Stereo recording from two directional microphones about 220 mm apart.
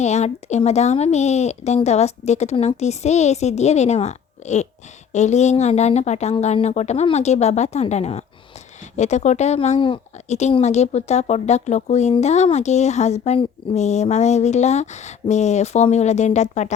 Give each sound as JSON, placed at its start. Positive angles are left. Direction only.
{"t": 0.0, "sound": "speech", "side_deg": 30}